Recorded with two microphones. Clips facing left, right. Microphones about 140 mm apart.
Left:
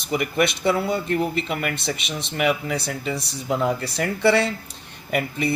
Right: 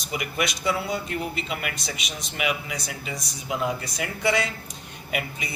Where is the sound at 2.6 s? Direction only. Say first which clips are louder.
Left 7 dB; 60° left (ahead or behind).